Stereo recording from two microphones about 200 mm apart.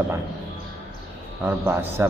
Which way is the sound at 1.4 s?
10° right (ahead or behind).